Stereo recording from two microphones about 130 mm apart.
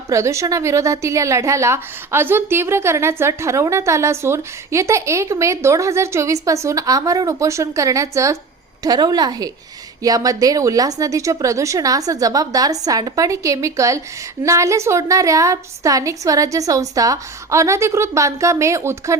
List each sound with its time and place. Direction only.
0.1 s a woman's voice: 25° right (ahead or behind)